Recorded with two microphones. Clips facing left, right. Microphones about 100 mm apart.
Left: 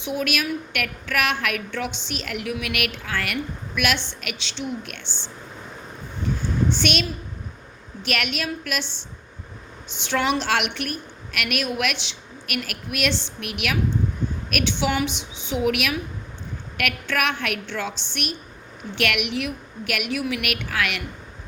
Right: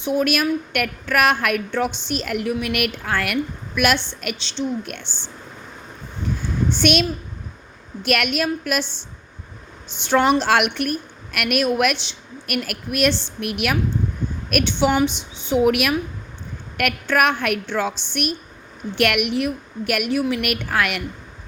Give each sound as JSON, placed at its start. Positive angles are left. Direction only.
{"t": 0.0, "sound": "a woman's voice", "side_deg": -40}
{"t": 4.9, "sound": "a woman's voice", "side_deg": -50}
{"t": 6.7, "sound": "a woman's voice", "side_deg": -50}
{"t": 8.0, "sound": "a woman's voice", "side_deg": -50}
{"t": 10.0, "sound": "a woman's voice", "side_deg": -40}
{"t": 14.5, "sound": "a woman's voice", "side_deg": -35}
{"t": 20.1, "sound": "a woman's voice", "side_deg": -30}
{"t": 20.4, "sound": "a woman's voice", "side_deg": -45}